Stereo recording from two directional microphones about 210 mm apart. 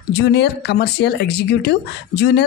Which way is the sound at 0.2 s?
50° left (ahead or behind).